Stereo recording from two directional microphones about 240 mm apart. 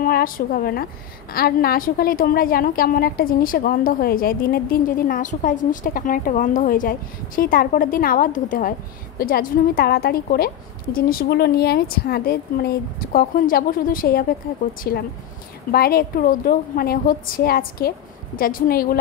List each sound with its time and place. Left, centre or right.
0.0 s a woman's voice: left